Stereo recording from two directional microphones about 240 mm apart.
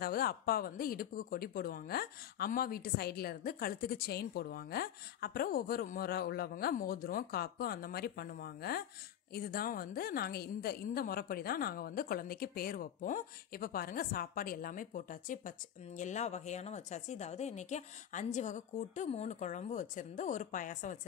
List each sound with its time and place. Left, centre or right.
0.0 s a woman's voice: left